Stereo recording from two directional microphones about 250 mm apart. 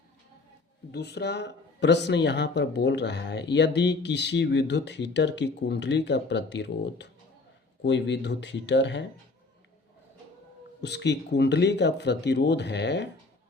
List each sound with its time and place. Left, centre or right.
0.9 s speech: left
10.8 s speech: left